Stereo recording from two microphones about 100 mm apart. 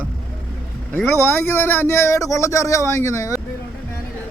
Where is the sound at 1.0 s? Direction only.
25° left (ahead or behind).